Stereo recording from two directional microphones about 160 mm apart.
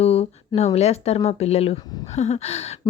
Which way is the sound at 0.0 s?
40° left (ahead or behind).